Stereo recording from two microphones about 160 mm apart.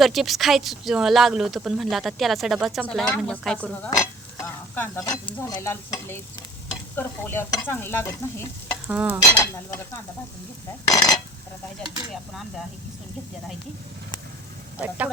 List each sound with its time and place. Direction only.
0.0 s speech: centre (ahead or behind)
3.8 s stir: 20° left (ahead or behind)
8.9 s stir: 10° right (ahead or behind)
9.4 s stir: 15° left (ahead or behind)
10.9 s a sound: 20° left (ahead or behind)
14.8 s stir: 10° right (ahead or behind)